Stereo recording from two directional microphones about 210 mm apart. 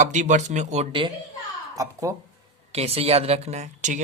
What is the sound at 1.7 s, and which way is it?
Speech, 15° right (ahead or behind).